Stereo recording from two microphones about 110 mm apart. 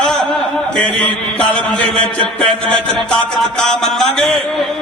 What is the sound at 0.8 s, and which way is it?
Speech, 10° left (ahead or behind).